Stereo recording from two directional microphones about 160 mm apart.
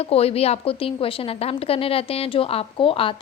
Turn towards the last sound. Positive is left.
turn(degrees=35)  # may be behind; listen again after turning